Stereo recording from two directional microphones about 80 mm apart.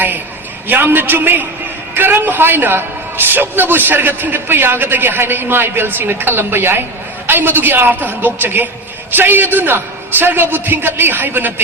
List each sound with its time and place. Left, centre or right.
0.7 s a man's voice: right